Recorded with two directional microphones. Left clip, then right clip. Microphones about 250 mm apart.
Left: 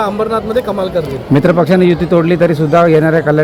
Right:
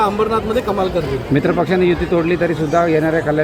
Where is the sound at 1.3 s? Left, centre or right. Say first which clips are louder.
Left 6 dB; left.